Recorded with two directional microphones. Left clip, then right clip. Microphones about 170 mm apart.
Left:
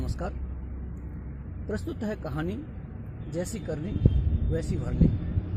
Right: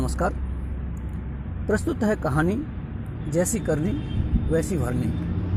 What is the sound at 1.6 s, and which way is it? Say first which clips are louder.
Speech: right 10 dB; 55° right (ahead or behind).